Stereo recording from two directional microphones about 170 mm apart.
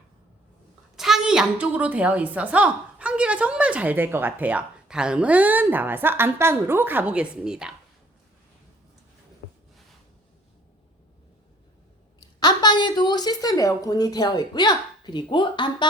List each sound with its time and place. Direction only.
0.9 s a woman's voice: centre (ahead or behind)
12.4 s a woman's voice: 25° left (ahead or behind)